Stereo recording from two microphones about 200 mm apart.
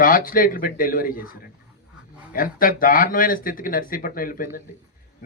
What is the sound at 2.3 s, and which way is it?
A man's voice, 45° left (ahead or behind).